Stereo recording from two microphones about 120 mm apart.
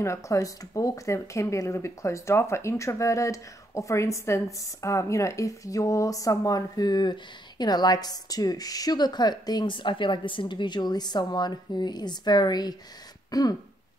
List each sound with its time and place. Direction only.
0.0 s speech: 25° left (ahead or behind)
13.3 s throat clearing: 30° left (ahead or behind)